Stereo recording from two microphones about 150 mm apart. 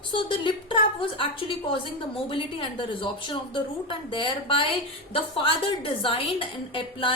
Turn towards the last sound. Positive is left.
turn(degrees=35)  # may be behind; listen again after turning